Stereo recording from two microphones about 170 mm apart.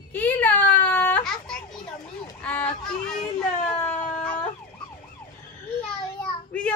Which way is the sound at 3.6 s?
5° left (ahead or behind).